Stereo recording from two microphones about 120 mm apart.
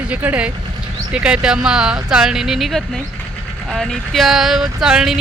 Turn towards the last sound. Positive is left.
turn(degrees=-5)  # may be behind; listen again after turning